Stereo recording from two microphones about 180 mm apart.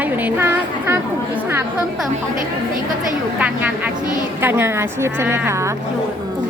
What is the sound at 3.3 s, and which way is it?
Speech, 10° right (ahead or behind).